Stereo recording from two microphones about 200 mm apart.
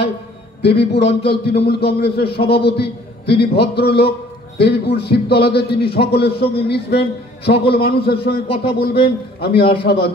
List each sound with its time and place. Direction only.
0.6 s a man's voice: 55° left (ahead or behind)